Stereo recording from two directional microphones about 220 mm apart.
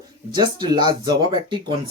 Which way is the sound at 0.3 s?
20° right (ahead or behind).